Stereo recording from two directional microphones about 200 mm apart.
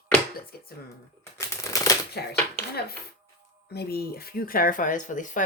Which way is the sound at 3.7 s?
50° left (ahead or behind).